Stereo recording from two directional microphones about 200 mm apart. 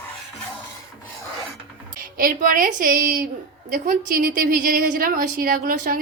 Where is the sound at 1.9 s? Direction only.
45° right (ahead or behind).